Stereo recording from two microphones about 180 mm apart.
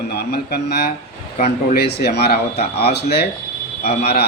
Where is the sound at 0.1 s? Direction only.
60° left (ahead or behind).